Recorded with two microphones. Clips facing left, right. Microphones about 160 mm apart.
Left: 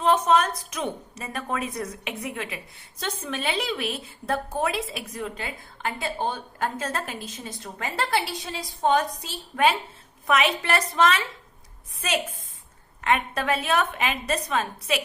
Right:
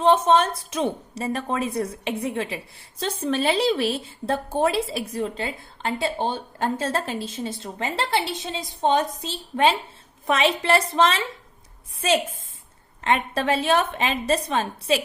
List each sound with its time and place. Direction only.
0.0 s a woman's voice: 30° right (ahead or behind)